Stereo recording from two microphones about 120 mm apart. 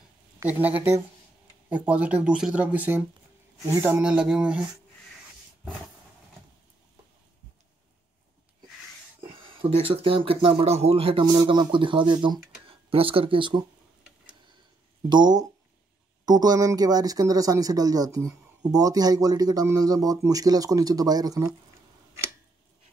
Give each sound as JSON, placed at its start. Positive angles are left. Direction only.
{"t": 0.5, "sound": "speech", "side_deg": -15}
{"t": 4.0, "sound": "speech", "side_deg": -10}
{"t": 9.2, "sound": "speech", "side_deg": -50}
{"t": 11.2, "sound": "speech", "side_deg": -40}
{"t": 15.0, "sound": "speech", "side_deg": -35}